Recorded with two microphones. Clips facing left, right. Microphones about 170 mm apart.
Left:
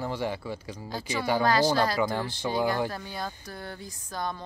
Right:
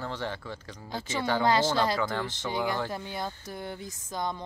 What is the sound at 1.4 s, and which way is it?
Speech, 20° right (ahead or behind).